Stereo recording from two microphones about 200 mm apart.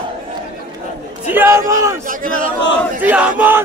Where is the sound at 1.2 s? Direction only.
10° right (ahead or behind).